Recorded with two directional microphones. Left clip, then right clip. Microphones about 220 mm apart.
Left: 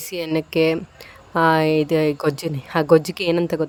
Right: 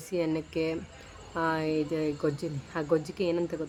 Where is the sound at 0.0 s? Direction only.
40° left (ahead or behind).